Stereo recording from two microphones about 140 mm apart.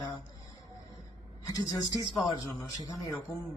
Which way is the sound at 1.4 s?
25° left (ahead or behind).